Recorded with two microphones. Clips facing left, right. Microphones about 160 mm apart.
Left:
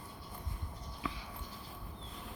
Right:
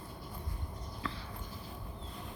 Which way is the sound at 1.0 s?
15° left (ahead or behind).